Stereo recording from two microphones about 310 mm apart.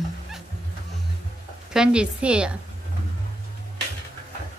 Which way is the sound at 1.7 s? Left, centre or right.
Centre.